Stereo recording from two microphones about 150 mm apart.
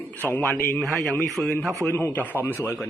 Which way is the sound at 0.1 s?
15° left (ahead or behind).